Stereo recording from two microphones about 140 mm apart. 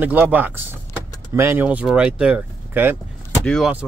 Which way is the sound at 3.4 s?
5° left (ahead or behind).